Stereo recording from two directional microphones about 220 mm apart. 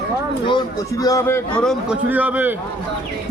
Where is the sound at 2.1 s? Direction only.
5° right (ahead or behind).